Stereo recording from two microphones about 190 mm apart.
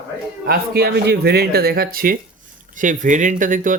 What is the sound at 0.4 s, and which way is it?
Speech, 55° right (ahead or behind).